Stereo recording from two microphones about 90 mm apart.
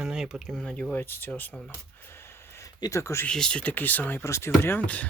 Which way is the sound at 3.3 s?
10° left (ahead or behind).